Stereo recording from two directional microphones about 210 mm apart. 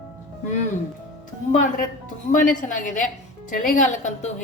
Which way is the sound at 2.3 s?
40° left (ahead or behind).